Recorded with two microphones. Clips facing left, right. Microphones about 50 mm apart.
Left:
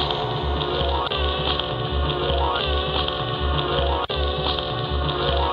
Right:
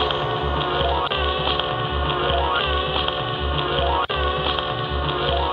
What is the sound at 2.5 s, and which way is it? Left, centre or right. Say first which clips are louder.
Hum: right 2 dB; right.